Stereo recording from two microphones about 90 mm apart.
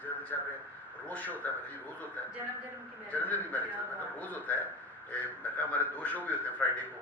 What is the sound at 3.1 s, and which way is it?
A man's voice, 20° left (ahead or behind).